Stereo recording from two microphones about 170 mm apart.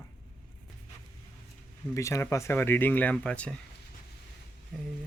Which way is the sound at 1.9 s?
15° left (ahead or behind).